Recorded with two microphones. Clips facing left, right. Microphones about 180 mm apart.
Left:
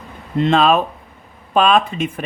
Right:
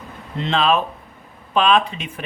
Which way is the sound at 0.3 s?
50° left (ahead or behind).